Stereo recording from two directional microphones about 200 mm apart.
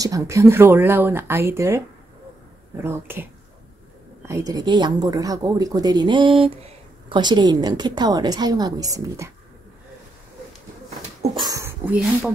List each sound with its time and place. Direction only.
0.0 s speech: 15° right (ahead or behind)
2.8 s speech: 10° right (ahead or behind)
4.5 s speech: 20° right (ahead or behind)
11.3 s speech: 20° right (ahead or behind)